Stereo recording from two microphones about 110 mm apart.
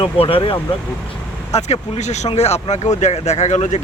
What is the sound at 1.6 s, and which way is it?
Speech, 85° left.